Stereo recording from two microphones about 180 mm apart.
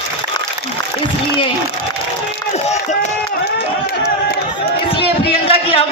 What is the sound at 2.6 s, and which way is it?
Run, 40° left (ahead or behind).